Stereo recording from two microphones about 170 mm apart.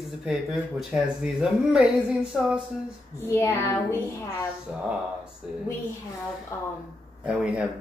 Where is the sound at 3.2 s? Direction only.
15° left (ahead or behind).